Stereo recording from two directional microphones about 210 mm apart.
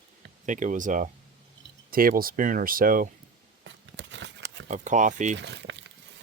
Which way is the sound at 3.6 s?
60° right (ahead or behind).